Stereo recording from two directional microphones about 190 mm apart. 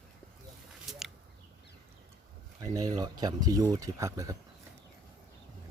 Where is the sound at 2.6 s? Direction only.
20° right (ahead or behind).